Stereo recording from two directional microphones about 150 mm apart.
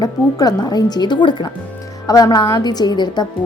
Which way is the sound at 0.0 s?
25° left (ahead or behind).